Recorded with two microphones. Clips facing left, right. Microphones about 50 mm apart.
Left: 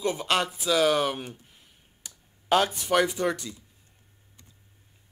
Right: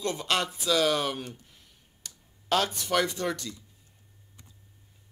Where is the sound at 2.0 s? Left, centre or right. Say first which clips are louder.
Left 4 dB; centre.